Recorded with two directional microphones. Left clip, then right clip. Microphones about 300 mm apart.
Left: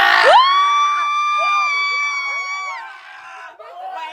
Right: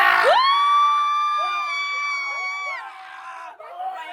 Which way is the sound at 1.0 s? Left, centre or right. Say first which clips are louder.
Left 4 dB; centre.